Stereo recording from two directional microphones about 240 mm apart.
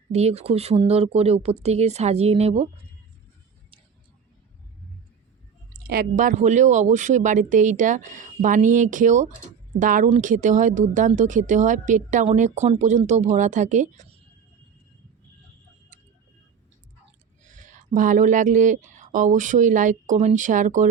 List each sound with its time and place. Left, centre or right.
0.1 s speech: right
5.7 s speech: right
17.4 s speech: right